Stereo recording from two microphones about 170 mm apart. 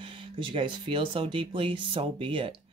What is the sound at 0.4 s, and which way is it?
Speech, 30° right (ahead or behind).